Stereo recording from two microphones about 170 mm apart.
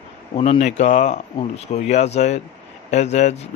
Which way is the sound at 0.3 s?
35° left (ahead or behind).